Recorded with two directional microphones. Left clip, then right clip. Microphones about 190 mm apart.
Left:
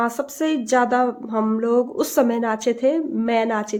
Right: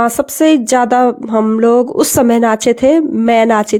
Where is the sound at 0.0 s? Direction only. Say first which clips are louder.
Right 11 dB; 45° right (ahead or behind).